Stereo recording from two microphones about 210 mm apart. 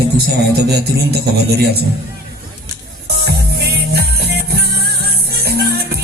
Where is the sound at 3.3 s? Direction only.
50° right (ahead or behind).